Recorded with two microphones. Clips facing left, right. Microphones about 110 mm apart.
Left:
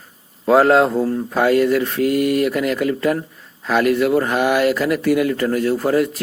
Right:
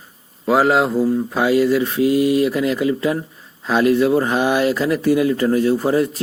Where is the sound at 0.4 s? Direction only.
Centre (ahead or behind); by 5.7 s 20° right (ahead or behind).